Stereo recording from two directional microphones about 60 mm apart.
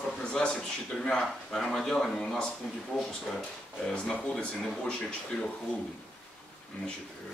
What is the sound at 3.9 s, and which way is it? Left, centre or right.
Speech, centre.